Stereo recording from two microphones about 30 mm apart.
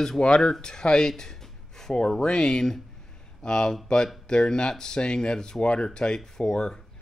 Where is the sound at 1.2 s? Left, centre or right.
Centre.